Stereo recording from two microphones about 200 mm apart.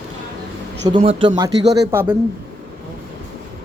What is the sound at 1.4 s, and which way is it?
Speech, 55° right (ahead or behind).